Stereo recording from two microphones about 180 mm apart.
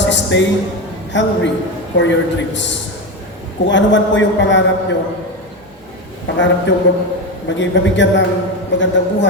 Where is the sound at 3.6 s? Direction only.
90° left.